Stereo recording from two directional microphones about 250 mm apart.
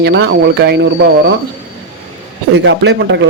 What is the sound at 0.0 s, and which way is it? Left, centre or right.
Speech, right.